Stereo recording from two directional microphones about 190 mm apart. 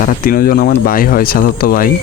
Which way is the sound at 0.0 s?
50° left (ahead or behind).